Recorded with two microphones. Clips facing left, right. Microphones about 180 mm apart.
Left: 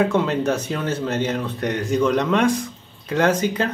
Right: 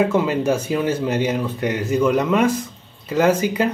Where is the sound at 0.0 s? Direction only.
5° right (ahead or behind).